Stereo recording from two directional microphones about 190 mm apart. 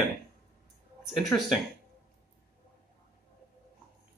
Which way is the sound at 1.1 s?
Centre (ahead or behind).